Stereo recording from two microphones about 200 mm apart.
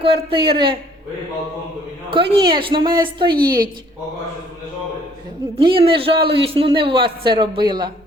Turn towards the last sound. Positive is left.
turn(degrees=-20)  # may be behind; listen again after turning